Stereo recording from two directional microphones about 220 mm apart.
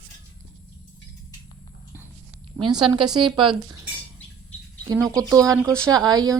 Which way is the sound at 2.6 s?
20° right (ahead or behind).